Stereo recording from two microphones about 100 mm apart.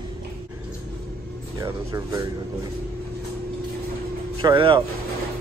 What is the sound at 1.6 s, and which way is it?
Speech, 35° right (ahead or behind).